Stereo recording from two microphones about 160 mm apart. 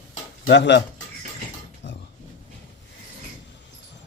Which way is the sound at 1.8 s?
90° left.